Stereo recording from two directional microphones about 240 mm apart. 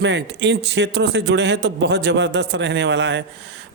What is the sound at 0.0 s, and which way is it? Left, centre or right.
Speech, right.